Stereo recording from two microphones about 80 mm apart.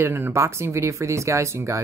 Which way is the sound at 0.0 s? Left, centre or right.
Right.